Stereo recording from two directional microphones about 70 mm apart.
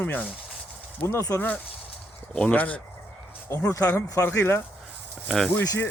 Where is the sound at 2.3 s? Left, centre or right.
Centre.